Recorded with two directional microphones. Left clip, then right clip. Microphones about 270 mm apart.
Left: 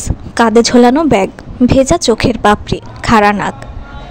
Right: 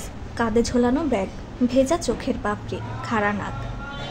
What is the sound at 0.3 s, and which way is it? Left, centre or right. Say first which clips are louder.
A woman's voice: left 14 dB; left.